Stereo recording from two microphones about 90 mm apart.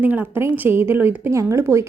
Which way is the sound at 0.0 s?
20° right (ahead or behind).